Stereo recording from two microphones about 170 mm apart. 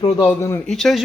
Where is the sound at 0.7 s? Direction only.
Centre (ahead or behind).